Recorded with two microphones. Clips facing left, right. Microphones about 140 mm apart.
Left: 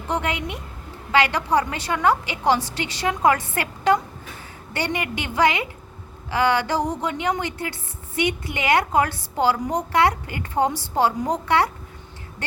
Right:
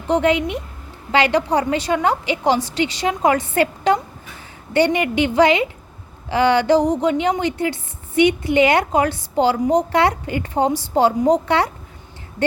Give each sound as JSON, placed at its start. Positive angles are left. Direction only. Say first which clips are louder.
{"t": 0.1, "sound": "a woman's voice", "louder": "right 9 dB", "side_deg": -25}